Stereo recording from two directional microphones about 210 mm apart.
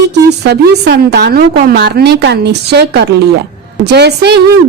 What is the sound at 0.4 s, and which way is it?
A woman's voice, 50° right (ahead or behind).